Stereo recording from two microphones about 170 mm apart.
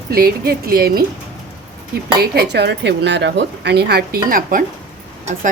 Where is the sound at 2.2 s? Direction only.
70° right (ahead or behind).